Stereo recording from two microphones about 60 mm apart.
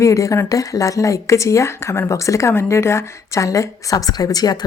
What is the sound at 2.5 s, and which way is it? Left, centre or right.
A woman's voice, left.